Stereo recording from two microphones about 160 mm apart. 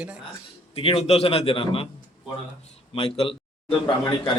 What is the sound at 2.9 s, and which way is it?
Speech, 35° left (ahead or behind).